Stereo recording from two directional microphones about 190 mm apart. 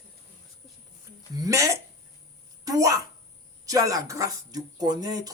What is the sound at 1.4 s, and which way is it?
A man's voice, 15° right (ahead or behind).